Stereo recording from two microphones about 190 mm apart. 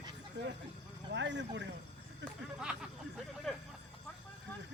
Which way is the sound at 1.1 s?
70° right (ahead or behind).